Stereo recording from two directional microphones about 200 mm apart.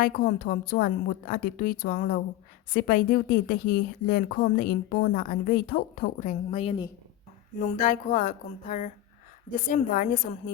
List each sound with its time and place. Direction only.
0.0 s a woman's voice: 45° left (ahead or behind)
7.6 s a sound: 40° left (ahead or behind)
9.6 s a woman's voice: 45° left (ahead or behind)